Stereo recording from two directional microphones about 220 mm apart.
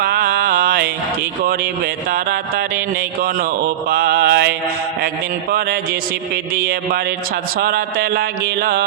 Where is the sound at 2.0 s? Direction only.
45° right (ahead or behind).